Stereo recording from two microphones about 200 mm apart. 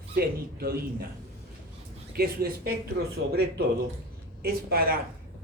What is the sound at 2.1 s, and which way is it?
Speech, 50° right (ahead or behind).